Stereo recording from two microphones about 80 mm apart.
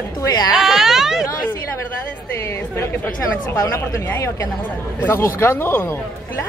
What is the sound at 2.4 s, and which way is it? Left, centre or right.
Speech, left.